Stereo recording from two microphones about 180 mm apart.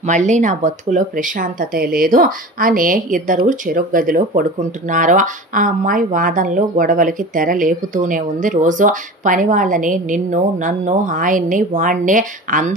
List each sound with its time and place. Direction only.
0.0 s speech: 40° right (ahead or behind)